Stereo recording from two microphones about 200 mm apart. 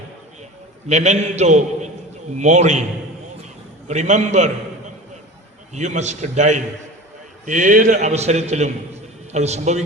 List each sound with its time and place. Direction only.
0.9 s a man's voice: 35° right (ahead or behind)
3.8 s a man's voice: 35° right (ahead or behind)
5.7 s a man's voice: 35° right (ahead or behind)